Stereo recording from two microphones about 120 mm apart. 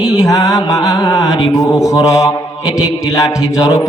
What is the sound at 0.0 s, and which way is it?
Mantra, 30° left (ahead or behind).